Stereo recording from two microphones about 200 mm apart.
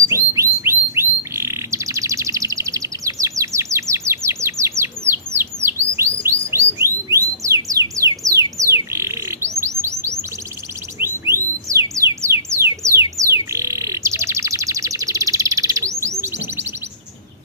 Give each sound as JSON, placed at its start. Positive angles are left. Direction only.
{"t": 0.1, "sound": "bird", "side_deg": -15}